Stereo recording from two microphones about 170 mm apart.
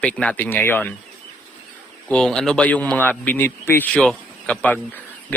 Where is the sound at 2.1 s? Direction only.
5° left (ahead or behind).